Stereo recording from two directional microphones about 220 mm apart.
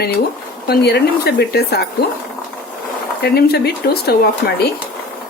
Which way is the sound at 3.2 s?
45° left (ahead or behind).